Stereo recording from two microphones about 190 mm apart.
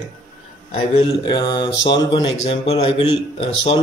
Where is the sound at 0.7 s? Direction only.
30° left (ahead or behind).